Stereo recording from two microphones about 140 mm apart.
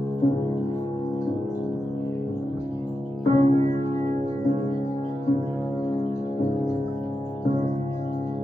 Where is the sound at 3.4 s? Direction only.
60° right (ahead or behind).